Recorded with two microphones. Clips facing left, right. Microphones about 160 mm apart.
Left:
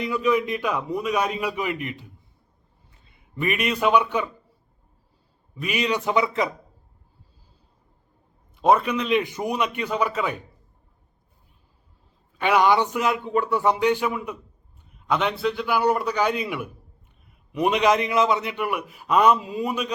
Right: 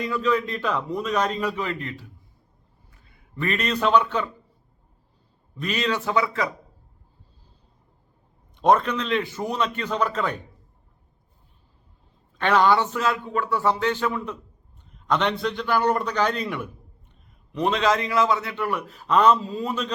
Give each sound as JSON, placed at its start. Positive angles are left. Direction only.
{"t": 0.0, "sound": "a man's voice", "side_deg": 15}
{"t": 5.5, "sound": "a man's voice", "side_deg": 10}
{"t": 8.5, "sound": "a man's voice", "side_deg": 5}
{"t": 12.4, "sound": "a man's voice", "side_deg": 10}